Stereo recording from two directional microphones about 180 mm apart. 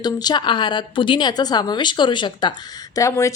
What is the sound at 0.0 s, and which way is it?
A woman's voice, 20° left (ahead or behind).